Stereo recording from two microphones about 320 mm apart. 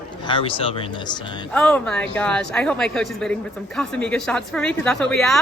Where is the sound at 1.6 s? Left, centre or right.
Centre.